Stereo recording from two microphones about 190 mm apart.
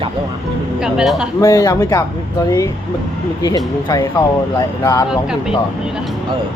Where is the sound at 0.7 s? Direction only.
5° right (ahead or behind).